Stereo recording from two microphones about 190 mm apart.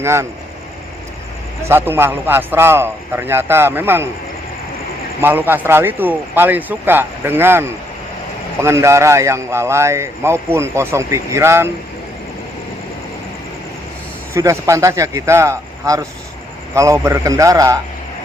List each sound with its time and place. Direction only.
0.0 s a man's voice: 15° right (ahead or behind)
1.6 s a man's voice: 10° right (ahead or behind)
5.2 s a man's voice: 10° right (ahead or behind)
14.3 s a man's voice: 15° right (ahead or behind)